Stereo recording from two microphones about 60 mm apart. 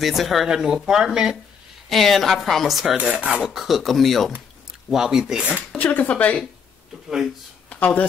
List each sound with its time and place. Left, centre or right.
0.0 s a woman's voice: centre
1.9 s a woman's voice: centre
3.0 s filing: centre
3.4 s a woman's voice: centre
5.8 s speech: left
7.7 s speech: left